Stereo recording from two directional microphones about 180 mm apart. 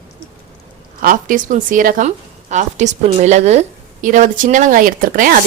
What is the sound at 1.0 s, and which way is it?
A woman's voice, 50° right (ahead or behind).